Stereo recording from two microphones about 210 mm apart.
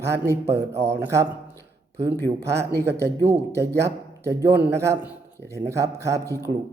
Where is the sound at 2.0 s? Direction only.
50° right (ahead or behind).